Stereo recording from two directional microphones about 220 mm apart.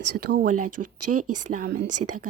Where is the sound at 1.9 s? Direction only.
90° right.